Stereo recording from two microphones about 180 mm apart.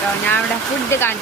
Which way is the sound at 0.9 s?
10° left (ahead or behind).